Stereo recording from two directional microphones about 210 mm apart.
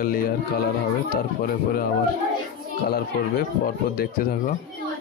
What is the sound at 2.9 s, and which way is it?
Speech, 45° left (ahead or behind).